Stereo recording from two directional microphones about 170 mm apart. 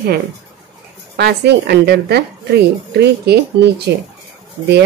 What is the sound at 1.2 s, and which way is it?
A woman's voice, 75° right (ahead or behind).